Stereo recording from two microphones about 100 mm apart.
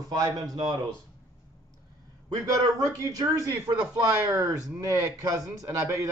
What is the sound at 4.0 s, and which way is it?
Speech, 35° right (ahead or behind).